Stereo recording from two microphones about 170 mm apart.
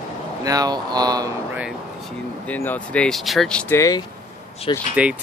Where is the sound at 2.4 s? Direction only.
10° left (ahead or behind).